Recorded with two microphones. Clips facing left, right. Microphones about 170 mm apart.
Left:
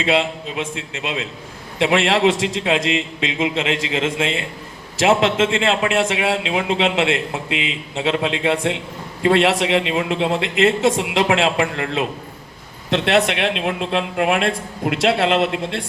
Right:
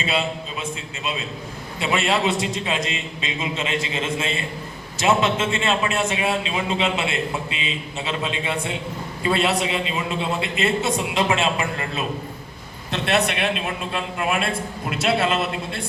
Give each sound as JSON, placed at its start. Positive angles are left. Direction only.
{"t": 0.0, "sound": "a man's voice", "side_deg": 90}